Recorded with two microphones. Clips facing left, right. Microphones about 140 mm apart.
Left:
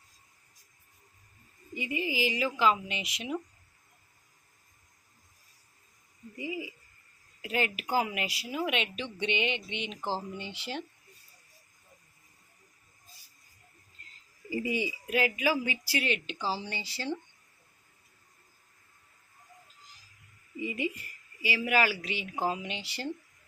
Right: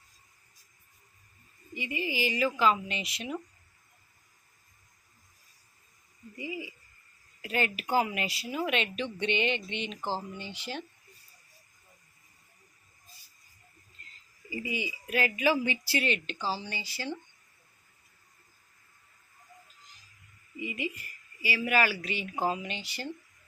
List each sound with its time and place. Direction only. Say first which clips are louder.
1.7 s speech: left 1 dB; 25° left (ahead or behind)
6.3 s speech: left 2 dB; 20° left (ahead or behind)
10.0 s speech: left 1 dB; centre (ahead or behind)
10.3 s speech: left 1 dB; 25° left (ahead or behind)
14.5 s speech: left 4 dB; 45° left (ahead or behind)
14.8 s speech: left 1 dB; 20° left (ahead or behind)
20.6 s a woman's voice: left 2 dB; 30° left (ahead or behind)
21.4 s speech: even; 15° left (ahead or behind)
22.6 s speech: even; 25° left (ahead or behind)